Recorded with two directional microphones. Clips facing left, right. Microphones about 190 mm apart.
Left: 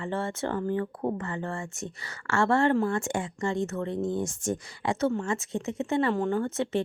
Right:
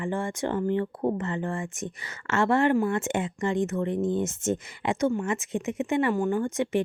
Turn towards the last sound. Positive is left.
turn(degrees=-15)  # may be behind; listen again after turning